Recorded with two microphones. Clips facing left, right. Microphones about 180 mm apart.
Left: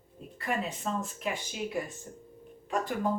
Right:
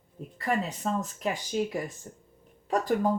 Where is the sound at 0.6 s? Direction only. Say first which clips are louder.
Right 3 dB; 40° right (ahead or behind).